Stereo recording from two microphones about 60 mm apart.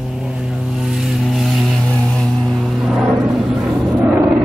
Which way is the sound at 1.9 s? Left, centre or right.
Centre.